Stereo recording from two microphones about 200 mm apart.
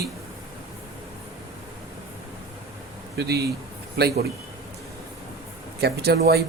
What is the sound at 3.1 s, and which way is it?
Speech, 55° right (ahead or behind).